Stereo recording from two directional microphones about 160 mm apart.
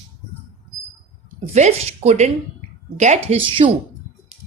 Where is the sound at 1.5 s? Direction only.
45° right (ahead or behind).